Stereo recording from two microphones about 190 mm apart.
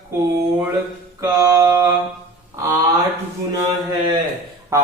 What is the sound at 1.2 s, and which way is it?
Mantra, 15° right (ahead or behind).